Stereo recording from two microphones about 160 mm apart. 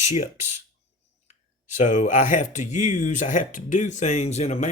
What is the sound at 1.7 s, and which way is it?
Speech, 50° left (ahead or behind).